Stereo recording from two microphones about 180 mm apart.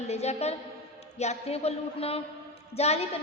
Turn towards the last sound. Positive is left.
turn(degrees=35)  # may be behind; listen again after turning